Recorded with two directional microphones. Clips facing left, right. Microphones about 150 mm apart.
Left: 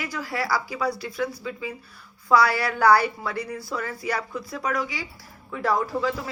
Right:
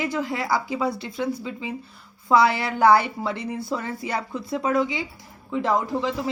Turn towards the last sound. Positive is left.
turn(degrees=-20)  # may be behind; listen again after turning